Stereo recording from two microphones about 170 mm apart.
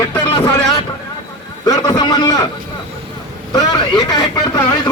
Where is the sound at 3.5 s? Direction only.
25° left (ahead or behind).